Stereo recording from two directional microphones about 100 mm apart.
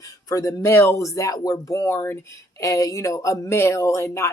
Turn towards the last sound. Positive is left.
turn(degrees=25)  # may be behind; listen again after turning